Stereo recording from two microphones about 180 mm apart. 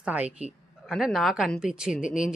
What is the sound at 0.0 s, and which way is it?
A woman's voice, 5° right (ahead or behind).